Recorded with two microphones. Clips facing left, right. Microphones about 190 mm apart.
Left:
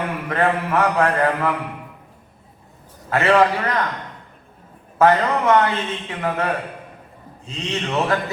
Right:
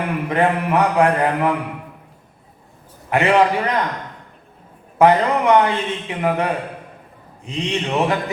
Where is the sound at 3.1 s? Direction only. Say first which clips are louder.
Right 1 dB; 15° right (ahead or behind).